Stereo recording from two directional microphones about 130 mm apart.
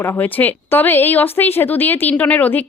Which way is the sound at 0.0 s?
15° left (ahead or behind).